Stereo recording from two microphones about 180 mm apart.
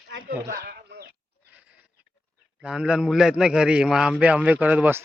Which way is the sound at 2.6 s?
5° right (ahead or behind).